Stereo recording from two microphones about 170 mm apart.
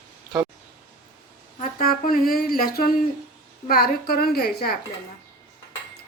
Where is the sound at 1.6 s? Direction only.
55° left (ahead or behind).